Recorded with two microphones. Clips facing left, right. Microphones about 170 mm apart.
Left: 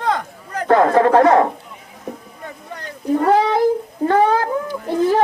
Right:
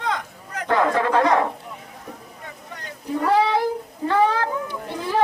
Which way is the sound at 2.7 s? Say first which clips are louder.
Left 8 dB; 45° left (ahead or behind).